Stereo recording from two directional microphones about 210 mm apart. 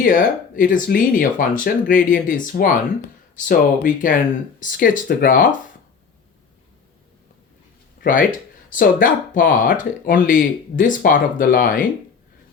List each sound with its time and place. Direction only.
0.0 s speech: 40° left (ahead or behind)
8.0 s speech: 40° left (ahead or behind)